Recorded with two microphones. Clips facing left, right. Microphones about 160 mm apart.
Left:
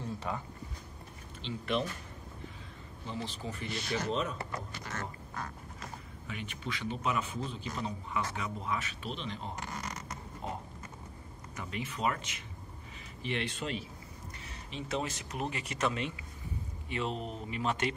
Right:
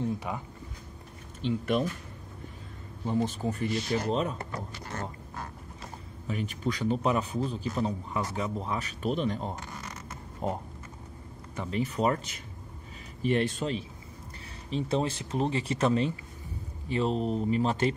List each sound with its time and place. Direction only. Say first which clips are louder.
0.0 s a sound: right 5 dB; 15° right (ahead or behind)
1.4 s speech: right 6 dB; 50° right (ahead or behind)
3.1 s a man's voice: right 10 dB; 50° right (ahead or behind); by 17.8 s 35° right (ahead or behind)